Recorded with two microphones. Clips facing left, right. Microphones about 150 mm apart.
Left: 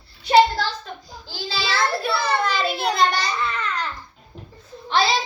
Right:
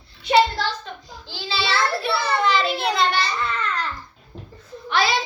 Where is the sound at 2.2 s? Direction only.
40° left (ahead or behind).